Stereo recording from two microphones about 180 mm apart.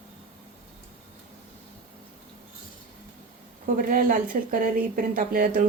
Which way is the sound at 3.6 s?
50° right (ahead or behind).